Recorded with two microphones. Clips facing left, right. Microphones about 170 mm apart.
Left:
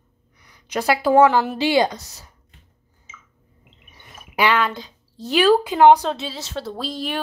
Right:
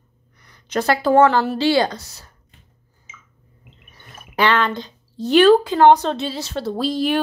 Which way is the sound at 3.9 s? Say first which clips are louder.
Right 1 dB; 15° left (ahead or behind).